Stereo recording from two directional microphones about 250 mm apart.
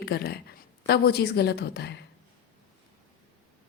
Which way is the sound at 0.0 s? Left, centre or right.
Left.